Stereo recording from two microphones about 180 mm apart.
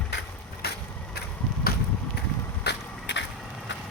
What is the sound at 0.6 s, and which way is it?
Vehicle, 60° left (ahead or behind).